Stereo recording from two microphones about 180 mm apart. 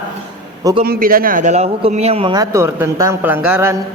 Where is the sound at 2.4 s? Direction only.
15° right (ahead or behind).